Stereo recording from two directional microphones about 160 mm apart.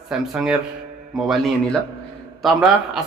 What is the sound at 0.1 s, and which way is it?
Speech, 5° right (ahead or behind).